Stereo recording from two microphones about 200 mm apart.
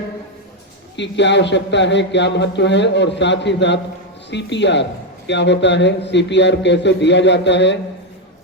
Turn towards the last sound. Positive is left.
turn(degrees=60)  # may be behind; listen again after turning